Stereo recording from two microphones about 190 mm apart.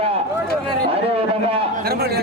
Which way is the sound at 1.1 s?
30° right (ahead or behind).